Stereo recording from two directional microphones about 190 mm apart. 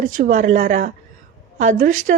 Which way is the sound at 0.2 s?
45° right (ahead or behind).